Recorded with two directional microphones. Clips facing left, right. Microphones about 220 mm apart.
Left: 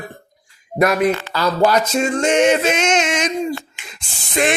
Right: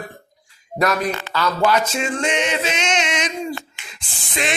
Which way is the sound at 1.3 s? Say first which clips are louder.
Left 3 dB; 35° left (ahead or behind).